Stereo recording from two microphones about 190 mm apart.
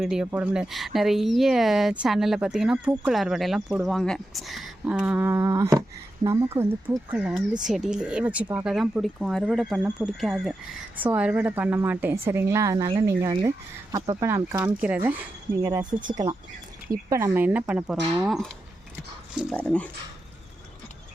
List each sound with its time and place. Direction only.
0.0 s a woman's voice: 5° right (ahead or behind)
19.5 s speech: 5° left (ahead or behind)